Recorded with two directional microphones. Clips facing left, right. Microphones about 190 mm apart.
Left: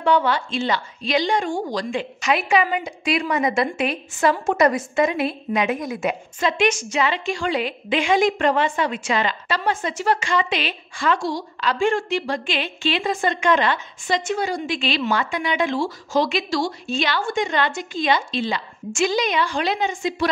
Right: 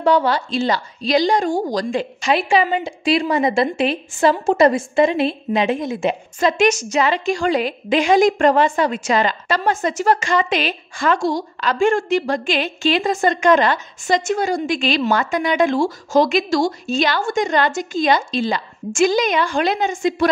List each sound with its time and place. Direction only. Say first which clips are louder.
0.0 s a woman's voice: right 3 dB; 35° right (ahead or behind)
6.4 s a woman's voice: right 4 dB; 40° right (ahead or behind)